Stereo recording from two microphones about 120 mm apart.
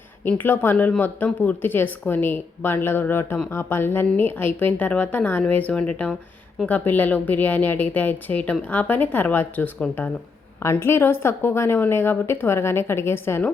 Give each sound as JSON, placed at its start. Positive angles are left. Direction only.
{"t": 0.3, "sound": "a woman's voice", "side_deg": 15}